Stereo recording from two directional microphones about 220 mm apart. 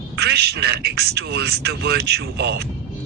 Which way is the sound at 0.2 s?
45° right (ahead or behind).